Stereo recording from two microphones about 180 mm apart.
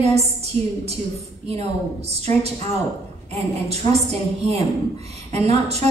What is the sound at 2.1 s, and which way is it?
A woman's voice, 35° right (ahead or behind).